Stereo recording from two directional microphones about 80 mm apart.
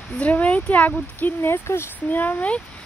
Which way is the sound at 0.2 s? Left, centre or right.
Centre.